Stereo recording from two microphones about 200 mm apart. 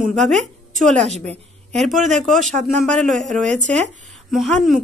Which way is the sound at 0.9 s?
35° right (ahead or behind).